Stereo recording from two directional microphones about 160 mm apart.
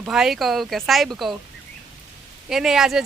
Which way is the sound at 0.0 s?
5° right (ahead or behind).